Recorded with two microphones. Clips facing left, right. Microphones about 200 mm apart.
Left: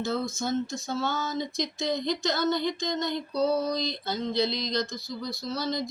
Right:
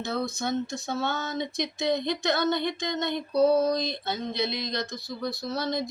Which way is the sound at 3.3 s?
20° right (ahead or behind).